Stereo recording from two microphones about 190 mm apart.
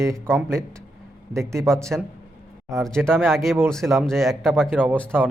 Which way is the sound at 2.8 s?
5° left (ahead or behind).